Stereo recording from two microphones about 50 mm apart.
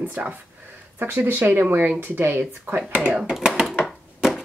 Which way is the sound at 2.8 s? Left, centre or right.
Right.